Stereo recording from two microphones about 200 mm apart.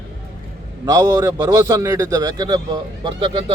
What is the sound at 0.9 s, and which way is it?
A man's voice, 20° right (ahead or behind).